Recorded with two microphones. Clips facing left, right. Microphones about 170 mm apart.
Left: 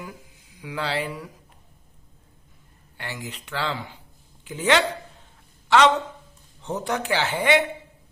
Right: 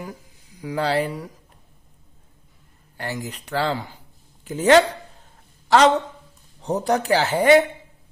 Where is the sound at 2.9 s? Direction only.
40° right (ahead or behind).